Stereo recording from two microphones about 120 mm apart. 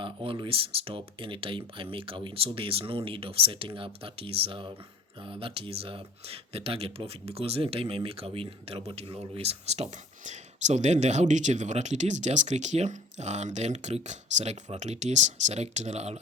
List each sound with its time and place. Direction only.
0.0 s speech: 45° right (ahead or behind); by 16.2 s 65° right (ahead or behind)